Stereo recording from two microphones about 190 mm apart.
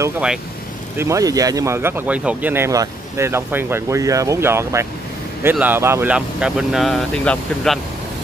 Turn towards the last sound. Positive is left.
turn(degrees=5)  # may be behind; listen again after turning